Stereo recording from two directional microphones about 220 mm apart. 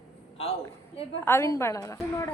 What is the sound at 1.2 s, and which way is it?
A woman's voice, 10° left (ahead or behind).